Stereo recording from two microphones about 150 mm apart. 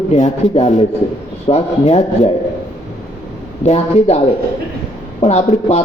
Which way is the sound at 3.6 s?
45° left (ahead or behind).